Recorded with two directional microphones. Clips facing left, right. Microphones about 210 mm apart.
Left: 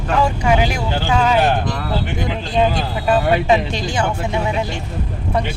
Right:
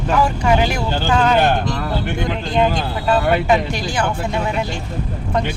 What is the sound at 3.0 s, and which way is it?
Speech, 20° left (ahead or behind).